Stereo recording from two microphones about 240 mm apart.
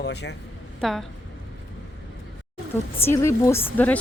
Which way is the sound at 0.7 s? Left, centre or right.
Centre.